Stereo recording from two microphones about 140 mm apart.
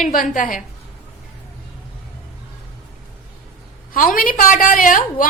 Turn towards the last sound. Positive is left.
turn(degrees=75)  # may be behind; listen again after turning